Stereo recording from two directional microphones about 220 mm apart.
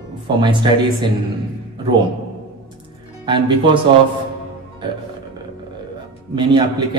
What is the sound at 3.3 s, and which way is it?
Speech, 20° right (ahead or behind).